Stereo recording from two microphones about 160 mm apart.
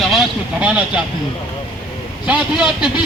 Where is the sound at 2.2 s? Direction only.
5° right (ahead or behind).